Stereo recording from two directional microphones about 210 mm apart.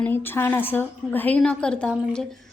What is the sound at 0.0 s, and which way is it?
A woman's voice, 10° left (ahead or behind).